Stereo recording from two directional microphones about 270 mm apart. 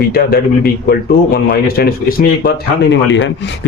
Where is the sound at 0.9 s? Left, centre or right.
Left.